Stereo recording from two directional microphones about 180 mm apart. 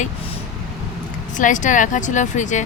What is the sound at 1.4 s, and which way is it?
Speech, 45° left (ahead or behind).